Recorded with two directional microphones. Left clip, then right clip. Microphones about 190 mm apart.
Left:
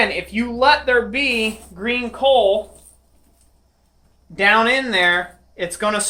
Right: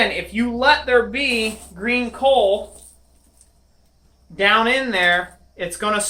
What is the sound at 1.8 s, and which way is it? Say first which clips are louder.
Speech: even; 30° left (ahead or behind).